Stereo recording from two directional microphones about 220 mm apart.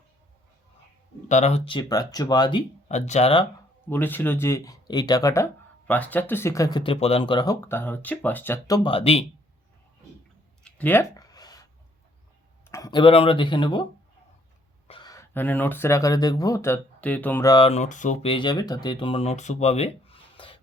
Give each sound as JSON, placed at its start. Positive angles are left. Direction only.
{"t": 1.3, "sound": "speech", "side_deg": 30}
{"t": 3.8, "sound": "speech", "side_deg": 10}
{"t": 10.6, "sound": "a sound", "side_deg": 5}
{"t": 12.6, "sound": "speech", "side_deg": 15}
{"t": 14.8, "sound": "speech", "side_deg": 20}
{"t": 17.5, "sound": "speech", "side_deg": 25}